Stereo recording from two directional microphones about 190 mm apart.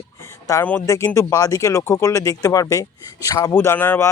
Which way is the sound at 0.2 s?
15° left (ahead or behind).